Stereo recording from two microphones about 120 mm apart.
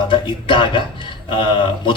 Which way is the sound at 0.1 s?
45° left (ahead or behind).